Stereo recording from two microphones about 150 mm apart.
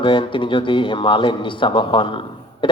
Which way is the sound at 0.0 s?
35° left (ahead or behind).